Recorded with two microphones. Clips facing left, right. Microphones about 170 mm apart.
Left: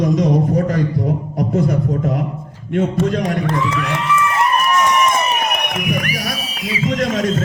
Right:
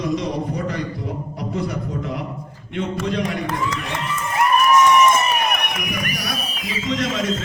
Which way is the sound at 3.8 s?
90° left.